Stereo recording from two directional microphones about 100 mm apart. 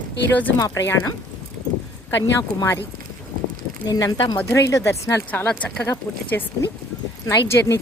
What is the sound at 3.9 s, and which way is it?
A woman's voice, 35° left (ahead or behind).